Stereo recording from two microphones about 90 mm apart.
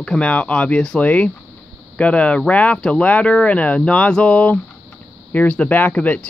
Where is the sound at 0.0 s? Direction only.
10° left (ahead or behind).